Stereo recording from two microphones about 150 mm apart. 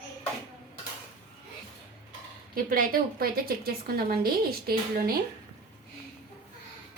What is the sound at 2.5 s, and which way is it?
A woman's voice, 75° right (ahead or behind).